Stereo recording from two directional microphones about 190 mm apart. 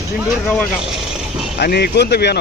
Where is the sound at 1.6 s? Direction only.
55° left (ahead or behind).